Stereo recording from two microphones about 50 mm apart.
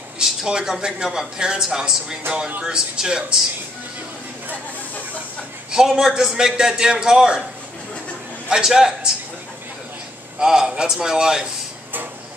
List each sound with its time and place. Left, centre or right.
0.2 s speech: centre
5.7 s speech: centre
8.5 s speech: centre
10.4 s speech: centre